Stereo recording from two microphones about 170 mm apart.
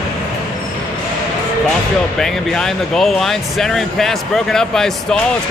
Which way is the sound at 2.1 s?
Centre (ahead or behind).